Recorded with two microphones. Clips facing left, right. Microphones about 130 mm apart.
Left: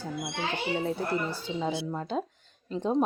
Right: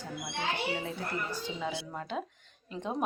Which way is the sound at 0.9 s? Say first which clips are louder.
Left 6 dB; 30° left (ahead or behind).